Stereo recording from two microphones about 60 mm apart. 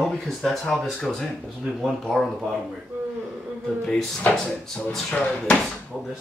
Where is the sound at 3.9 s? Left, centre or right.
Centre.